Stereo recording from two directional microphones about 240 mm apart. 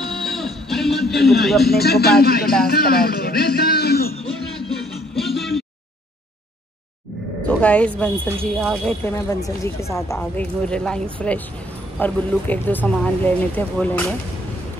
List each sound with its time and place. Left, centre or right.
0.0 s music: centre
1.7 s speech: left
4.6 s music: centre
7.4 s roaring cats: centre
8.5 s speech: centre
8.8 s speech: centre